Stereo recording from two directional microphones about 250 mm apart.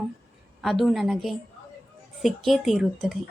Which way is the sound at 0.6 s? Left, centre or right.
Centre.